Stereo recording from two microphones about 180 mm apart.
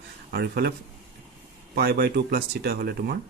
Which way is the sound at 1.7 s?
60° right (ahead or behind).